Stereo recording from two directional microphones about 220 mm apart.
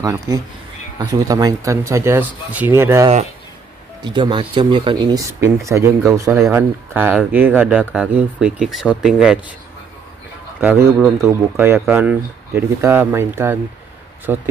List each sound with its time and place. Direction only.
0.0 s speech: 15° right (ahead or behind)
10.6 s speech: 10° right (ahead or behind)